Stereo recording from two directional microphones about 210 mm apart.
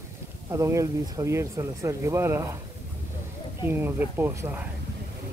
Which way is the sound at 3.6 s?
10° right (ahead or behind).